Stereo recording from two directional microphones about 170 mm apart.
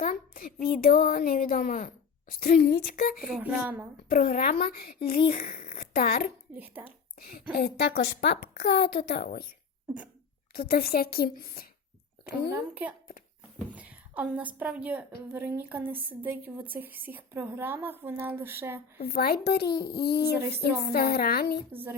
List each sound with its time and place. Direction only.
0.0 s a sound: 55° left (ahead or behind)
0.8 s speech: 55° left (ahead or behind)
3.2 s a woman's voice: 5° right (ahead or behind)
4.1 s a woman's voice: 55° left (ahead or behind); by 9.5 s 75° left (ahead or behind)
10.5 s speech: 60° left (ahead or behind)
12.5 s a woman's voice: 10° right (ahead or behind)
18.9 s a woman's voice: 60° left (ahead or behind)
21.7 s a woman's voice: 10° right (ahead or behind)